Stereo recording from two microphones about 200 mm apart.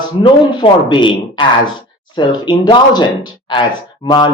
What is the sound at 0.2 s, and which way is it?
Speech, 25° left (ahead or behind).